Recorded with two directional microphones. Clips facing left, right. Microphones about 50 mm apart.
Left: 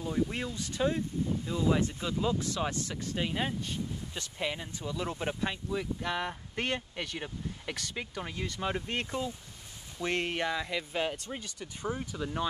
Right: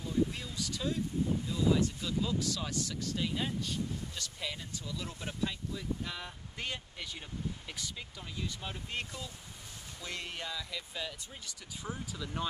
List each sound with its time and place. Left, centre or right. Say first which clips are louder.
0.0 s speech: left 2 dB; left
5.7 s speech: left 6 dB; left